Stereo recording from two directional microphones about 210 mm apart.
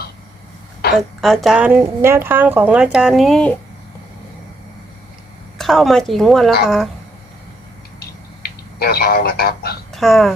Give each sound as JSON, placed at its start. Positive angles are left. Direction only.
{"t": 0.9, "sound": "a woman's voice", "side_deg": 0}
{"t": 5.5, "sound": "a woman's voice", "side_deg": 0}
{"t": 8.4, "sound": "speech", "side_deg": 50}
{"t": 9.9, "sound": "speech", "side_deg": 0}